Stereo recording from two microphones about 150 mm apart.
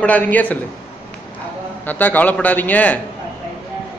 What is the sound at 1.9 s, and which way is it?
A man's voice, 10° left (ahead or behind).